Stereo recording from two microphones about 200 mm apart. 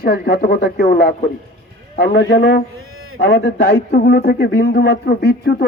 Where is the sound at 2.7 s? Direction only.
90° right.